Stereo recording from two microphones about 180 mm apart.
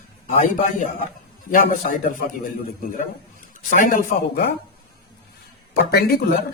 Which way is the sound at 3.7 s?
50° left (ahead or behind).